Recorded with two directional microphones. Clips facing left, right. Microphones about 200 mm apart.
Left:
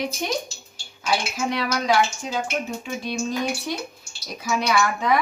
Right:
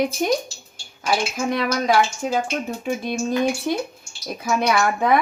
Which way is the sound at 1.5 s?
50° right (ahead or behind).